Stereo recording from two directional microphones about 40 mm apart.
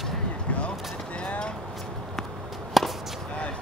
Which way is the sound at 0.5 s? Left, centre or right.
Left.